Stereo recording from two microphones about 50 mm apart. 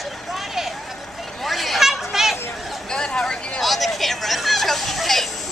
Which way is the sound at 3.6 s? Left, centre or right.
Centre.